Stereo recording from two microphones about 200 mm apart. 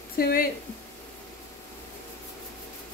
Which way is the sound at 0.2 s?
50° left (ahead or behind).